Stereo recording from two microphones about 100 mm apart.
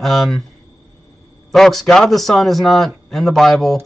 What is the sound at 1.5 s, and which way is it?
Speech, 5° left (ahead or behind).